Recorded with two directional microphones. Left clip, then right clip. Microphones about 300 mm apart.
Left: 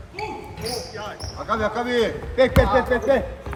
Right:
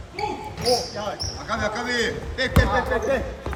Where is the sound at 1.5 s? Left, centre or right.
Centre.